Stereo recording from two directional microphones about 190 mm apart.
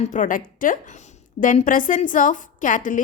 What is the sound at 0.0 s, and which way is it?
A woman's voice, 40° left (ahead or behind).